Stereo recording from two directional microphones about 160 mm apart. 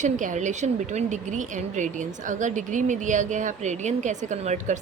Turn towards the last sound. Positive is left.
turn(degrees=-50)  # may be behind; listen again after turning